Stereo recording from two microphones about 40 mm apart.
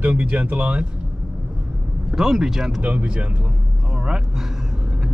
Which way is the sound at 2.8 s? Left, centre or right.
Right.